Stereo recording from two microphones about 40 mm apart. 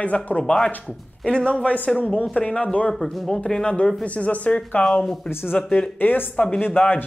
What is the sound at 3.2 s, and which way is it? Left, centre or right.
Speech, centre.